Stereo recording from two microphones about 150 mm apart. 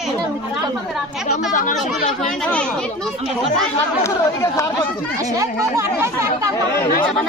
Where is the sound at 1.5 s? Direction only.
60° left (ahead or behind).